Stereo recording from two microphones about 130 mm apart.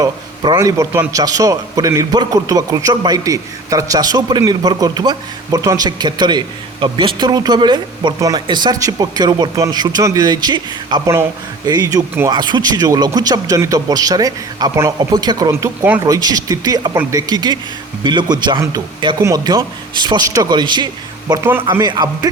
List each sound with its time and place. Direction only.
0.0 s a sound: 35° right (ahead or behind)
0.6 s a man's voice: 25° right (ahead or behind)
11.1 s a man's voice: 20° right (ahead or behind)
11.7 s a man's voice: 30° right (ahead or behind)
19.2 s a man's voice: 25° right (ahead or behind)